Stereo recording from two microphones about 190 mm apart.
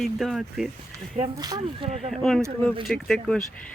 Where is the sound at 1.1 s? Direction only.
20° right (ahead or behind).